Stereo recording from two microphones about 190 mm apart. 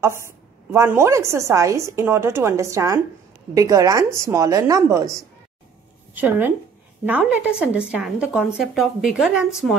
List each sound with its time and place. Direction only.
0.7 s a woman's voice: 15° right (ahead or behind)